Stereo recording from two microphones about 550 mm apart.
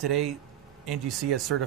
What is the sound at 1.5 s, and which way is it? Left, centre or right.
Speech, right.